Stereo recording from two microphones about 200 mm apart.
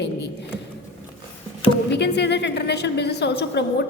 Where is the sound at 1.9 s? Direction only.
60° left (ahead or behind).